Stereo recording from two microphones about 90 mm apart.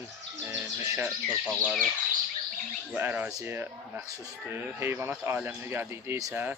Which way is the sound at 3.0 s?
25° right (ahead or behind).